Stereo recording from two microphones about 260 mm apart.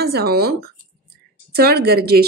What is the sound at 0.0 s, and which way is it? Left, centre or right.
A woman's voice, right.